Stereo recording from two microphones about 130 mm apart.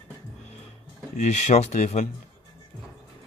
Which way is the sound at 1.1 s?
65° left (ahead or behind).